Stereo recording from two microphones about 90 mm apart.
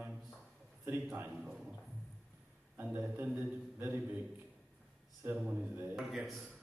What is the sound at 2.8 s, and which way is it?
A man's voice, 15° right (ahead or behind).